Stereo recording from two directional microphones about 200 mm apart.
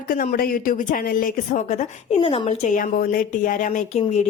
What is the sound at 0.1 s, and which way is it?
A woman's voice, 45° left (ahead or behind).